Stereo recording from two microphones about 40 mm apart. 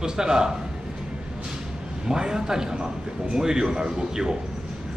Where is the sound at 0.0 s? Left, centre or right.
Centre.